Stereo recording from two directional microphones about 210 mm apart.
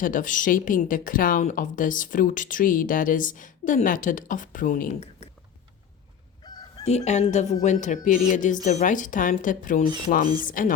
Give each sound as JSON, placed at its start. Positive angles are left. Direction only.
{"t": 0.0, "sound": "a woman's voice", "side_deg": 40}
{"t": 6.8, "sound": "a woman's voice", "side_deg": 30}